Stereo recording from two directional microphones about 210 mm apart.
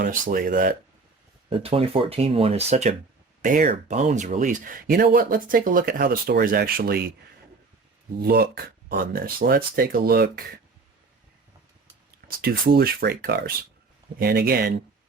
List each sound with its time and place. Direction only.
0.0 s speech: 40° right (ahead or behind)
1.5 s speech: 25° right (ahead or behind); by 7.1 s 45° right (ahead or behind)
8.2 s speech: 45° right (ahead or behind)
12.4 s speech: 45° right (ahead or behind)